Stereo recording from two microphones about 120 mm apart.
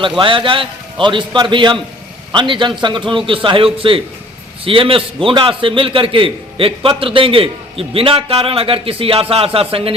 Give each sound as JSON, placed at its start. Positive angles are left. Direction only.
{"t": 0.2, "sound": "a man's voice", "side_deg": -45}